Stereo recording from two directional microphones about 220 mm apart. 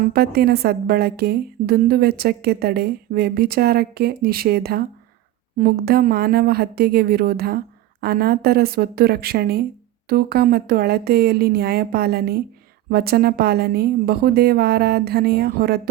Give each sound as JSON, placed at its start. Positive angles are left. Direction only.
{"t": 0.0, "sound": "a woman's voice", "side_deg": -45}